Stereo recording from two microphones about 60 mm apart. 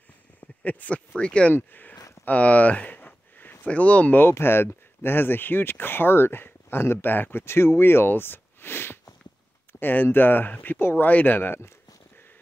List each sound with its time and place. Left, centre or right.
0.7 s speech: left
1.5 s speech: left
2.2 s a sound: left
3.6 s speech: left
11.1 s speech: left